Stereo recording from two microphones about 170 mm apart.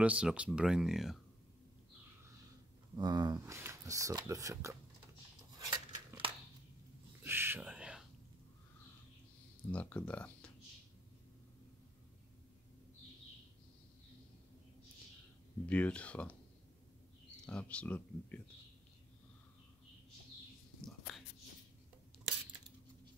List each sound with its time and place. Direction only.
0.0 s speech: 5° right (ahead or behind)
3.0 s speech: 25° right (ahead or behind)
5.7 s scissors: 30° right (ahead or behind)
7.2 s a sound: 15° right (ahead or behind)
9.7 s speech: 10° left (ahead or behind)
15.6 s speech: 10° left (ahead or behind)
17.5 s speech: 5° left (ahead or behind)